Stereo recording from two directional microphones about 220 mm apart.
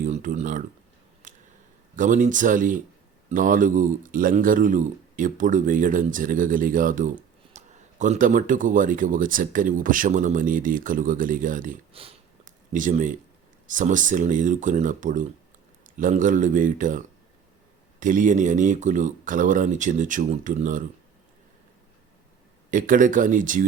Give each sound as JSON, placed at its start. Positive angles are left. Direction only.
{"t": 0.0, "sound": "speech", "side_deg": -35}
{"t": 1.2, "sound": "a sound", "side_deg": -35}
{"t": 2.0, "sound": "speech", "side_deg": -35}
{"t": 18.0, "sound": "speech", "side_deg": -35}
{"t": 22.7, "sound": "speech", "side_deg": -35}